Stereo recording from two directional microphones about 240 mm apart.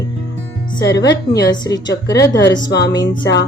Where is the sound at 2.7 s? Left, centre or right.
Left.